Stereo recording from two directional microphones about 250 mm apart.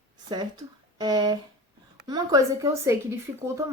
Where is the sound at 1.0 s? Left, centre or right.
Centre.